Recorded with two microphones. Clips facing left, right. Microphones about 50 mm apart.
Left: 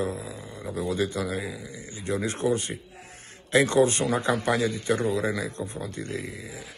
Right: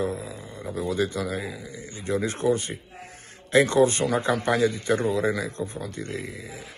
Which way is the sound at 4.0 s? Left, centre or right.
Right.